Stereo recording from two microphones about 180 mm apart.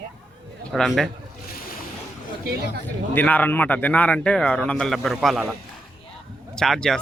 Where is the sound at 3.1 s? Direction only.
10° left (ahead or behind).